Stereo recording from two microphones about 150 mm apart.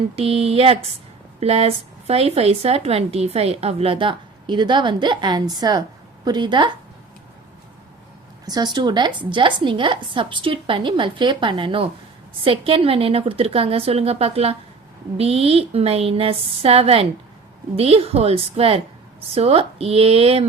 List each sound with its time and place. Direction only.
0.2 s speech: 40° right (ahead or behind)
8.4 s speech: 25° right (ahead or behind)